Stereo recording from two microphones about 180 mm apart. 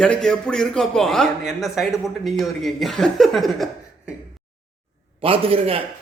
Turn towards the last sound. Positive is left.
turn(degrees=-30)  # may be behind; listen again after turning